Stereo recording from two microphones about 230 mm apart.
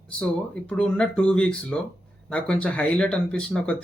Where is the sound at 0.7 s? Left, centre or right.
Centre.